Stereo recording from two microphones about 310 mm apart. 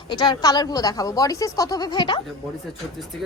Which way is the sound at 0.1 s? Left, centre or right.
Centre.